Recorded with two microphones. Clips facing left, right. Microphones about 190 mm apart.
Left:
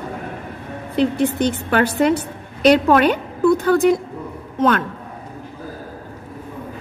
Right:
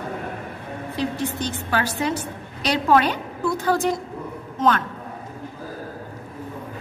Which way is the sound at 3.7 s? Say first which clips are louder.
Left 4 dB; 60° left (ahead or behind).